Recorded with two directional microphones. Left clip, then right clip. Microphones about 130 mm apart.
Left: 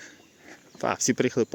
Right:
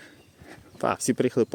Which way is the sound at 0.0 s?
20° right (ahead or behind).